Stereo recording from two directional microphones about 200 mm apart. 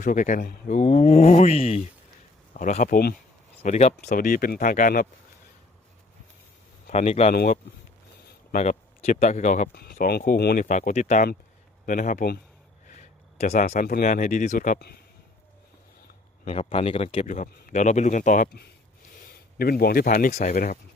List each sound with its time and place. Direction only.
0.0 s speech: 40° left (ahead or behind)
3.6 s speech: 35° left (ahead or behind)
6.8 s speech: 30° left (ahead or behind)
9.7 s speech: 50° left (ahead or behind)
13.0 s speech: 35° left (ahead or behind)
16.4 s speech: 30° left (ahead or behind)